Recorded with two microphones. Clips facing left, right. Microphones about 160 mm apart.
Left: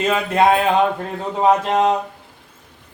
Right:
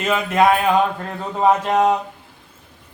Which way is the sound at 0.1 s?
30° left (ahead or behind).